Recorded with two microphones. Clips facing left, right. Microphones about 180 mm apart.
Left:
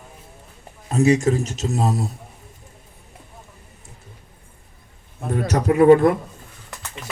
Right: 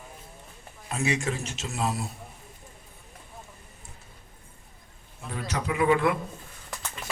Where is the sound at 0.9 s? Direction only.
40° left (ahead or behind).